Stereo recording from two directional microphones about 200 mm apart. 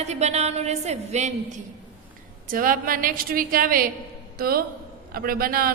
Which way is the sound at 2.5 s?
45° right (ahead or behind).